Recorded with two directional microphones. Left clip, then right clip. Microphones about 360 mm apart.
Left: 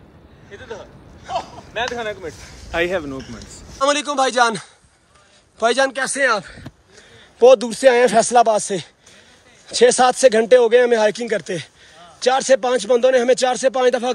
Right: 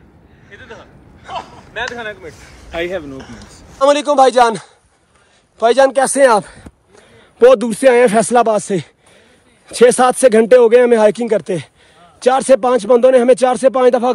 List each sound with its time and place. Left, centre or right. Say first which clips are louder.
0.5 s speech: left 1 dB; centre
1.7 s speech: even; left
2.7 s a man's voice: left 1 dB; centre